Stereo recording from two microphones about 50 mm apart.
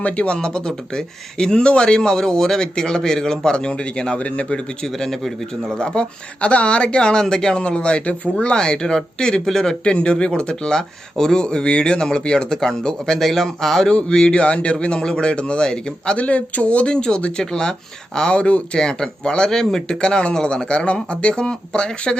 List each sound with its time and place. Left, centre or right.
0.0 s speech: left